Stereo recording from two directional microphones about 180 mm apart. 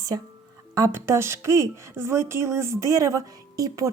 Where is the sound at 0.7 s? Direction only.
15° right (ahead or behind).